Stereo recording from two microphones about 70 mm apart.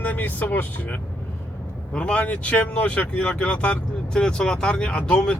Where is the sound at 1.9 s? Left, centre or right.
Centre.